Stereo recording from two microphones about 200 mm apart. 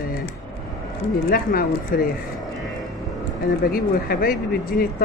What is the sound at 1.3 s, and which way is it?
Speech, 45° left (ahead or behind).